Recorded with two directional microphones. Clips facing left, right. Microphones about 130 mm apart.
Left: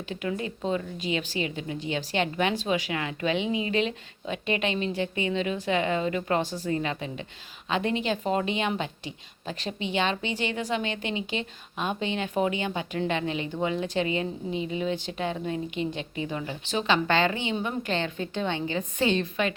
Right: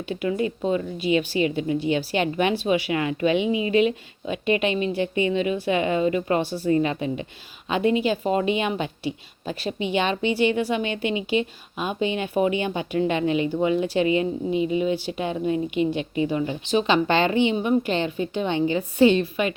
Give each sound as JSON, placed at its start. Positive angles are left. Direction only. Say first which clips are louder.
{"t": 0.6, "sound": "a woman's voice", "louder": "right 5 dB", "side_deg": -10}